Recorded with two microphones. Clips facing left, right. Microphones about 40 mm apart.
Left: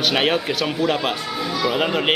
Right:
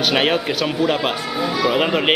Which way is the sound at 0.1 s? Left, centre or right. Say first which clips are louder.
Right 2 dB; centre.